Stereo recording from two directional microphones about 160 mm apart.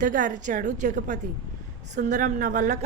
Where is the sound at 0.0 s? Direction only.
55° right (ahead or behind).